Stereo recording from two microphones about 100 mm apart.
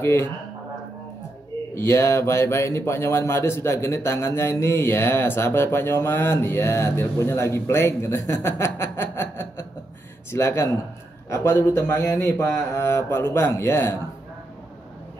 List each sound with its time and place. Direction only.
0.0 s a man's voice: 25° left (ahead or behind)
1.8 s a man's voice: 25° left (ahead or behind)